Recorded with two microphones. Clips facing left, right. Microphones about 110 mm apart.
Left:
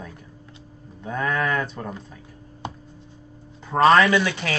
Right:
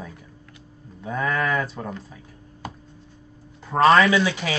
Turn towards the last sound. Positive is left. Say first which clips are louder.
# even
turn(degrees=-5)  # may be behind; listen again after turning